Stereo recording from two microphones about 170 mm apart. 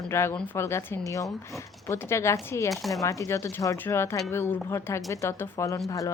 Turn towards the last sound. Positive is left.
turn(degrees=20)  # may be behind; listen again after turning